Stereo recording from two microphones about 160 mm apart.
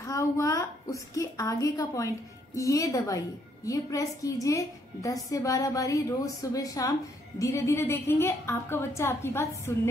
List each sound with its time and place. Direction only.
0.0 s a woman's voice: 20° left (ahead or behind)